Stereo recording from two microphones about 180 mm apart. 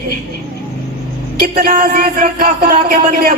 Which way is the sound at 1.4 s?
55° right (ahead or behind).